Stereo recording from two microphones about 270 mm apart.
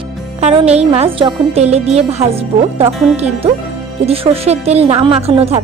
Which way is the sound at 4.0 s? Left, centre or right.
Right.